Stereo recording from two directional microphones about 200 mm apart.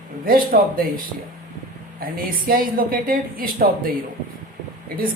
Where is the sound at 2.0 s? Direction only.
45° right (ahead or behind).